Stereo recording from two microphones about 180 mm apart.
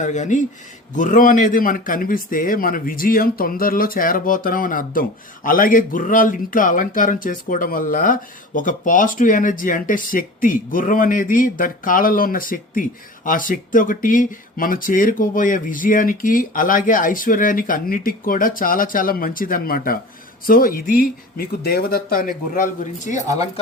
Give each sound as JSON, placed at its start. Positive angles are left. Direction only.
{"t": 0.0, "sound": "a man's voice", "side_deg": 45}